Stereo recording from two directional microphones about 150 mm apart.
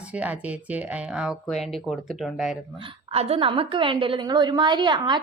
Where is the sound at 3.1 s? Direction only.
40° right (ahead or behind).